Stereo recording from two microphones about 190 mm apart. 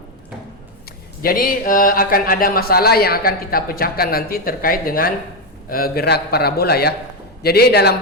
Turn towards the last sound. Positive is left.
turn(degrees=60)  # may be behind; listen again after turning